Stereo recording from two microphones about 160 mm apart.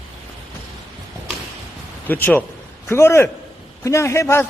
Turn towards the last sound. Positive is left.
turn(degrees=15)  # may be behind; listen again after turning